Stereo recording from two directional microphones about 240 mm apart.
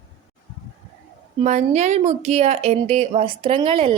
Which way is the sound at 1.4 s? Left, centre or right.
Right.